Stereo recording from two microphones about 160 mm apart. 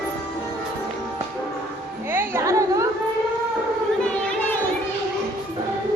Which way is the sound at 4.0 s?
10° left (ahead or behind).